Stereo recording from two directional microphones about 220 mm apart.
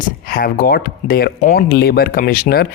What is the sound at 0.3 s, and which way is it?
Speech, 40° left (ahead or behind).